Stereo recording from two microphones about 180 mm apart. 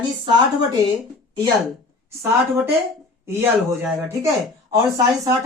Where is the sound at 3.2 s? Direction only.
10° right (ahead or behind).